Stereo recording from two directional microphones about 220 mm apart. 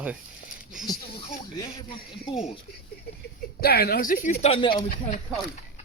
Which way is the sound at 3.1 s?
45° left (ahead or behind).